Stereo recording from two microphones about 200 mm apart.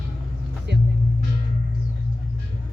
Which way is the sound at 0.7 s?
55° right (ahead or behind).